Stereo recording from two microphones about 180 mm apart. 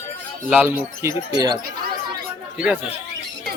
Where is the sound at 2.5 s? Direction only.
5° right (ahead or behind).